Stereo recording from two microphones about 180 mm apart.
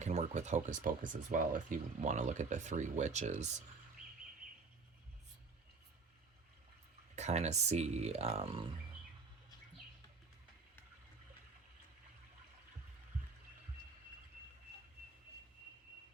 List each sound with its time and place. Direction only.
0.0 s speech: 40° right (ahead or behind)
7.2 s speech: 40° right (ahead or behind)